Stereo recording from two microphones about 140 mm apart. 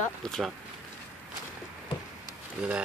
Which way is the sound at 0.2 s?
5° left (ahead or behind).